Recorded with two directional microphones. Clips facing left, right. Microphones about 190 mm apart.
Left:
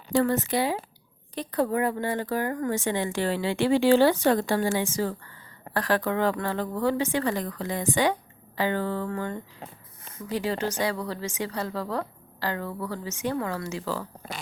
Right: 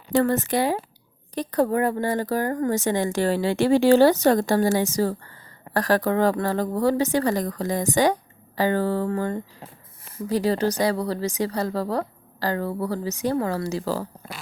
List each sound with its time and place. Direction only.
0.1 s speech: 50° right (ahead or behind)